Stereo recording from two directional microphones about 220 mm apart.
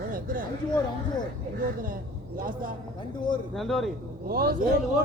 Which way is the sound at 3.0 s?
20° left (ahead or behind).